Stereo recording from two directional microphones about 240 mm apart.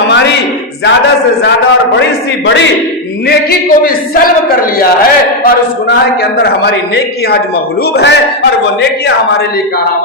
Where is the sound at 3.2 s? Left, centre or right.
Left.